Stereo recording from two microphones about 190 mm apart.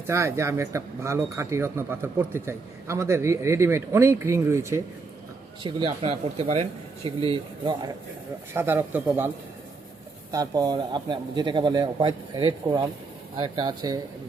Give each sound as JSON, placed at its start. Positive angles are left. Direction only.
{"t": 0.1, "sound": "speech", "side_deg": -15}
{"t": 5.6, "sound": "a man's voice", "side_deg": -30}
{"t": 8.5, "sound": "speech", "side_deg": -10}
{"t": 10.3, "sound": "a man's voice", "side_deg": -20}